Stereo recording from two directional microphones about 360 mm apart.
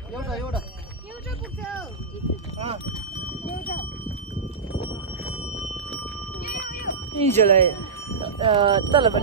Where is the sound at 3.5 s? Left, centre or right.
Left.